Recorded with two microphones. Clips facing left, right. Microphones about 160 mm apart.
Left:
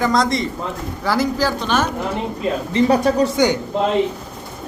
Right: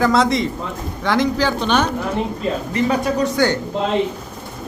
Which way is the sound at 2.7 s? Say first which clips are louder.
Left 5 dB; 35° left (ahead or behind).